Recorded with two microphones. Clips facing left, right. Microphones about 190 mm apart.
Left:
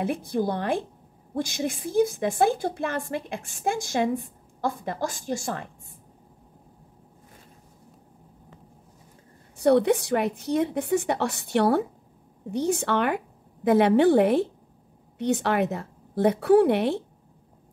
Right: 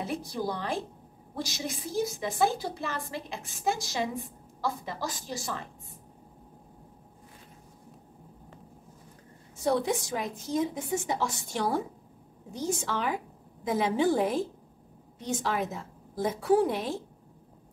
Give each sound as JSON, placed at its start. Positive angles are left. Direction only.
{"t": 0.0, "sound": "a woman's voice", "side_deg": 55}
{"t": 9.6, "sound": "a woman's voice", "side_deg": 65}